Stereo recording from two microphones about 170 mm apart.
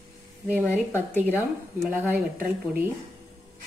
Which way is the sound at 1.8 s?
5° right (ahead or behind).